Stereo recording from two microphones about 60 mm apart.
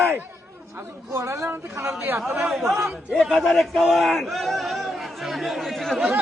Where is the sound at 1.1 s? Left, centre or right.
Right.